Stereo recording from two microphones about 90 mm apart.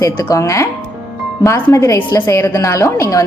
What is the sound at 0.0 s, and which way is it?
A woman's voice, 40° left (ahead or behind).